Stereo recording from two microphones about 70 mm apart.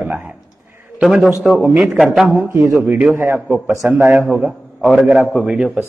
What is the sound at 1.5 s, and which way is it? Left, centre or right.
Speech, right.